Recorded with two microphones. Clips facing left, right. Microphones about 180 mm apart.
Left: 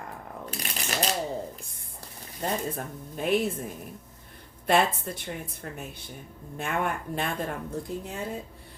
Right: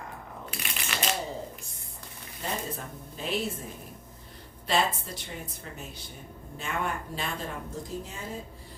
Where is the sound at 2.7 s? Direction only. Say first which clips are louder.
Left 5 dB; 55° left (ahead or behind).